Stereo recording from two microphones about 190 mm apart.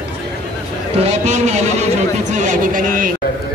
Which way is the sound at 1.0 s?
35° right (ahead or behind).